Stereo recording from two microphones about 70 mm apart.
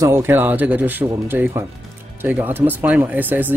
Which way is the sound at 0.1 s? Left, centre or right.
Right.